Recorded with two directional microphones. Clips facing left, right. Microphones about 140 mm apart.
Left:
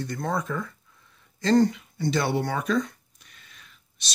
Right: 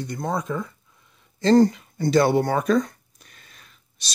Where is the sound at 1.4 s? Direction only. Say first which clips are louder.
Right 4 dB; 35° right (ahead or behind).